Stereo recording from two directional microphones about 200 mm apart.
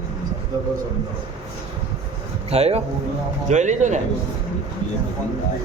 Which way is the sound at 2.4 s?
30° right (ahead or behind).